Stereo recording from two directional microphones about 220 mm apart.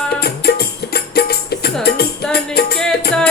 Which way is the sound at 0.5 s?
45° left (ahead or behind).